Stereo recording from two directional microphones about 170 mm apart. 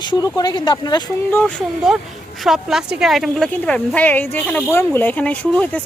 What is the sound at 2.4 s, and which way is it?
Speech, centre (ahead or behind).